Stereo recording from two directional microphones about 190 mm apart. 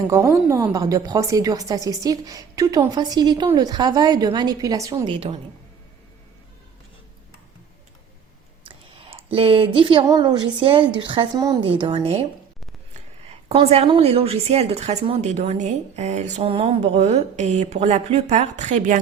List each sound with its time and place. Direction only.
0.1 s a woman's voice: 15° right (ahead or behind)
8.6 s a woman's voice: 30° right (ahead or behind)